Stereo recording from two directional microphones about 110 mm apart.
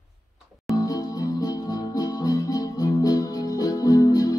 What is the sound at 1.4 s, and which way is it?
Music, 35° left (ahead or behind).